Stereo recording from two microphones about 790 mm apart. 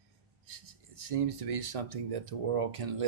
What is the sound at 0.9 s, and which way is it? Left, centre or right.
Speech, right.